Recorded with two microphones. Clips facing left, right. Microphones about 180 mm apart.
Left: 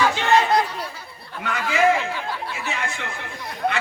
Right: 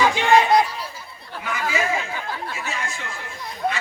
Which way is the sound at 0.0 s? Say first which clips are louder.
Right 2 dB; 15° right (ahead or behind).